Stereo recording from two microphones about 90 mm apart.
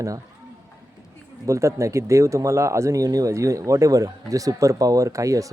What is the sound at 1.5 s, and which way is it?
Speech, 35° right (ahead or behind).